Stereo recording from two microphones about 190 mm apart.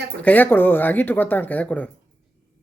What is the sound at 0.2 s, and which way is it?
Speech, 10° left (ahead or behind).